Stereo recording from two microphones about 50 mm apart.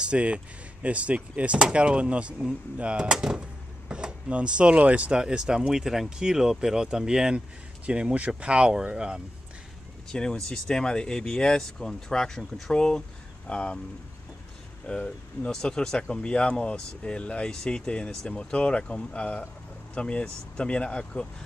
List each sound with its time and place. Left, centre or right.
0.0 s speech: right
5.2 s speech: centre
7.8 s speech: right
10.1 s speech: centre
14.9 s speech: centre